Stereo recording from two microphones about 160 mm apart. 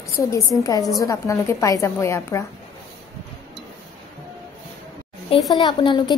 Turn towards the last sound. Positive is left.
turn(degrees=30)  # may be behind; listen again after turning